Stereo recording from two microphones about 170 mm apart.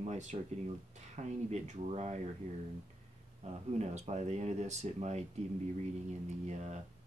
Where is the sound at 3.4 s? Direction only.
40° right (ahead or behind).